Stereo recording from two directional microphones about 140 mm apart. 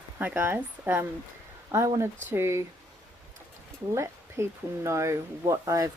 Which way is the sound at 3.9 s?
20° right (ahead or behind).